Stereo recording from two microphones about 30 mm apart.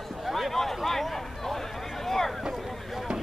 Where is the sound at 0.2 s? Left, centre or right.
Centre.